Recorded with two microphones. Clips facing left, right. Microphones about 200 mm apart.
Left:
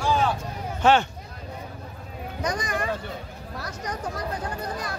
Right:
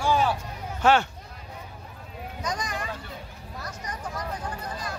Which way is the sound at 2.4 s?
60° left (ahead or behind).